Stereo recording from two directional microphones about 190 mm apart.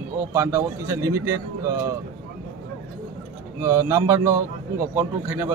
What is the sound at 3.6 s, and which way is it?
A man's voice, 15° right (ahead or behind).